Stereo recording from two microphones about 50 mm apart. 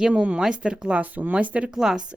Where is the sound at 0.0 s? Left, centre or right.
Right.